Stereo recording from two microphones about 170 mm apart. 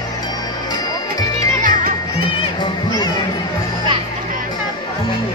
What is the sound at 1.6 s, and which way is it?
Music, 50° right (ahead or behind).